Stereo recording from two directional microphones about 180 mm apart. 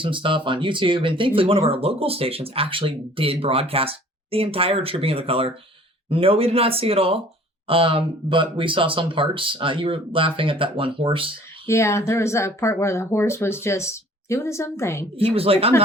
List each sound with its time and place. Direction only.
0.0 s speech: 30° right (ahead or behind)
11.6 s speech: 15° left (ahead or behind)
15.1 s speech: 30° right (ahead or behind)